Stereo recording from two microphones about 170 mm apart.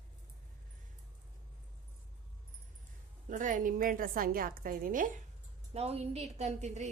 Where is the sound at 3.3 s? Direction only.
50° right (ahead or behind).